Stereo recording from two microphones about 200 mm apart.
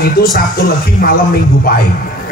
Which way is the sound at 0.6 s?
45° left (ahead or behind).